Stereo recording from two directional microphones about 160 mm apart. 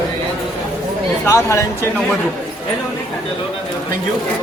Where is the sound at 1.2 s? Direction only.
15° left (ahead or behind).